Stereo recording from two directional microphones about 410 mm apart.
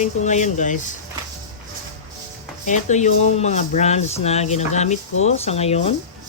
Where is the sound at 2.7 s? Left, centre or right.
Centre.